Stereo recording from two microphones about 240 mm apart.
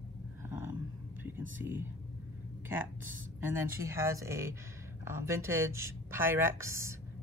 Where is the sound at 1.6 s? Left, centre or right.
Centre.